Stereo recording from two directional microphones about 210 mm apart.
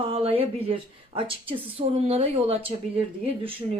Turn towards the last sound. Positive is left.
turn(degrees=-25)  # may be behind; listen again after turning